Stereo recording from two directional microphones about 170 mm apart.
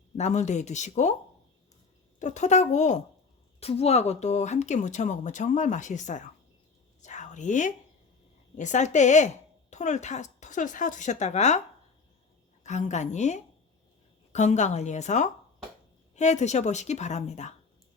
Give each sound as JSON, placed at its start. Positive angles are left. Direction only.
{"t": 0.2, "sound": "speech", "side_deg": 45}
{"t": 2.1, "sound": "speech", "side_deg": 45}
{"t": 12.6, "sound": "speech", "side_deg": 45}